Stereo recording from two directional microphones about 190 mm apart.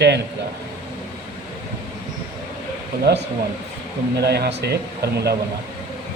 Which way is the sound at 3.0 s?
65° right (ahead or behind).